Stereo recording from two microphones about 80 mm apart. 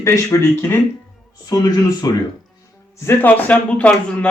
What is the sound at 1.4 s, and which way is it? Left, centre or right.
Speech, left.